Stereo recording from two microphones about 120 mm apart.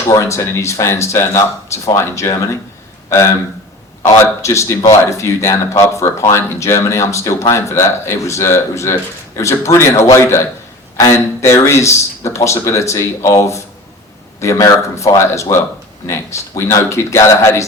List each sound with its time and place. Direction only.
0.1 s speech: 25° left (ahead or behind)
4.4 s speech: 25° left (ahead or behind)